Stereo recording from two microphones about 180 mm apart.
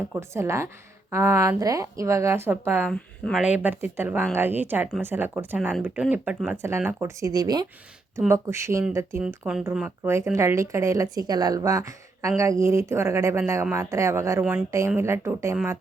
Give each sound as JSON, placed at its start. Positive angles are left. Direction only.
{"t": 0.1, "sound": "speech", "side_deg": -15}
{"t": 2.9, "sound": "speech", "side_deg": 5}
{"t": 3.4, "sound": "speech", "side_deg": -10}
{"t": 9.2, "sound": "a woman's voice", "side_deg": -5}